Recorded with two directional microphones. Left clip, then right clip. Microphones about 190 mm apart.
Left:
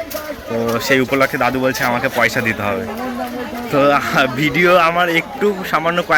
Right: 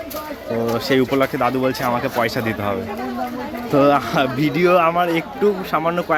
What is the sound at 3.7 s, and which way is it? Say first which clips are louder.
Speech: left 1 dB; 20° right (ahead or behind).